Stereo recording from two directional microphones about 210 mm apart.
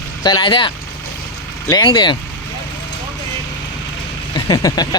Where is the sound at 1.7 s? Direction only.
25° left (ahead or behind).